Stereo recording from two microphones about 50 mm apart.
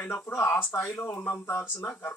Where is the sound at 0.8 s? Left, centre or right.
Left.